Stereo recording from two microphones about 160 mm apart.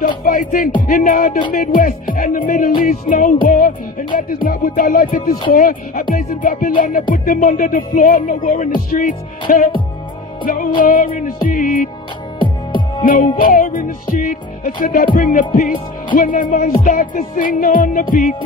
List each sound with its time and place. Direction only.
0.2 s music: 55° left (ahead or behind)
12.4 s music: 30° left (ahead or behind)
13.0 s music: 60° left (ahead or behind)